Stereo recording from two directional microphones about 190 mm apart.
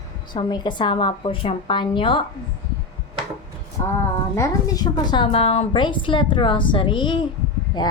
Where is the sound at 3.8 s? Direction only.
20° left (ahead or behind).